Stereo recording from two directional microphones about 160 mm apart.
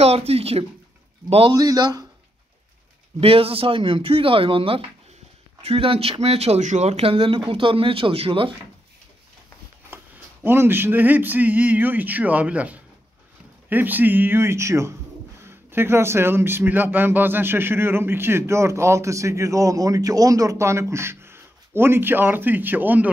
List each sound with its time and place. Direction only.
0.0 s speech: 40° right (ahead or behind)
1.5 s speech: 25° right (ahead or behind)
3.2 s speech: 35° right (ahead or behind)
10.4 s speech: 15° right (ahead or behind)